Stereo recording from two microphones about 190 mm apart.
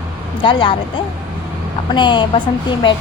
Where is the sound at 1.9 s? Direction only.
25° left (ahead or behind).